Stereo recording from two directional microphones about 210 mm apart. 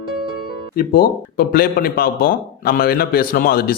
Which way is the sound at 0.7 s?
45° left (ahead or behind).